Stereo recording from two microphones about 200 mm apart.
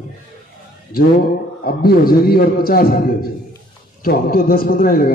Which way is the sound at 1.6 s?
50° left (ahead or behind).